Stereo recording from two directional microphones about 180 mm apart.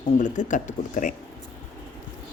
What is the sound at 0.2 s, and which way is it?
Speech, 45° left (ahead or behind).